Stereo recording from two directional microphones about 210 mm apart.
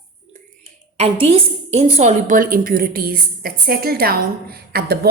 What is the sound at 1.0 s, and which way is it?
A woman's voice, 30° right (ahead or behind).